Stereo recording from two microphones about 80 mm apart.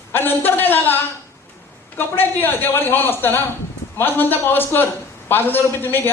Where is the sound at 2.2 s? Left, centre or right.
Left.